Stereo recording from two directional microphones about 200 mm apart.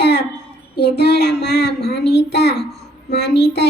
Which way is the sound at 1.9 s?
55° left (ahead or behind).